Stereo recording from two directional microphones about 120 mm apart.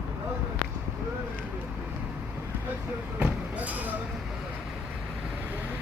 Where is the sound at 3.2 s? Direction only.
10° right (ahead or behind).